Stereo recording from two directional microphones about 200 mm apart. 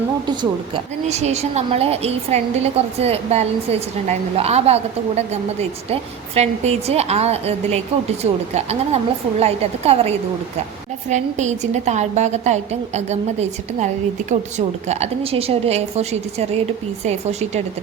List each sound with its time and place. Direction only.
0.3 s a woman's voice: 30° right (ahead or behind)